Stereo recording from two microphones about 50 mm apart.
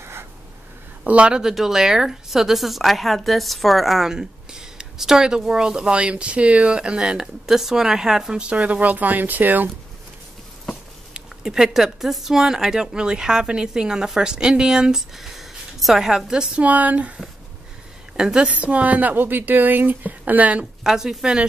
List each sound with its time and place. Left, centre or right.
0.0 s a sound: right
1.0 s speech: right
1.5 s a woman's voice: centre
4.1 s speech: centre; by 9.7 s right
11.4 s speech: centre
16.6 s speech: right
18.1 s a woman's voice: centre
18.5 s a woman's voice: right
20.8 s speech: centre